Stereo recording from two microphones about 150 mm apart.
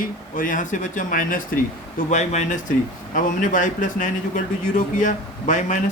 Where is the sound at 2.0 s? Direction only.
50° left (ahead or behind).